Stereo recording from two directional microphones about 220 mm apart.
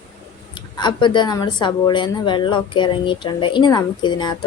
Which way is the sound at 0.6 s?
20° left (ahead or behind).